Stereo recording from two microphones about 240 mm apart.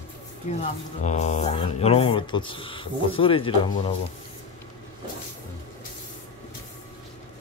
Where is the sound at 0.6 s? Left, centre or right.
Left.